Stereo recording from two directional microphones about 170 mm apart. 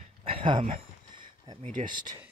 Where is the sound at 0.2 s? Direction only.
30° right (ahead or behind).